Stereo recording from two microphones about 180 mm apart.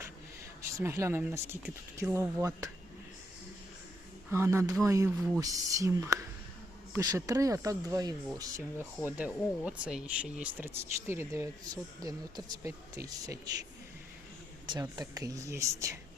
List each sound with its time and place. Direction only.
0.8 s speech: 15° right (ahead or behind)
4.3 s speech: 15° right (ahead or behind)
14.7 s speech: 20° right (ahead or behind)